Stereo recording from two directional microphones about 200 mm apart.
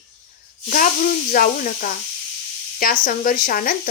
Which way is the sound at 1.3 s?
45° left (ahead or behind).